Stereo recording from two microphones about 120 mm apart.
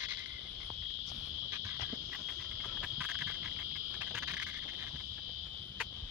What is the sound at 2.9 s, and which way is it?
Cricket, 5° right (ahead or behind).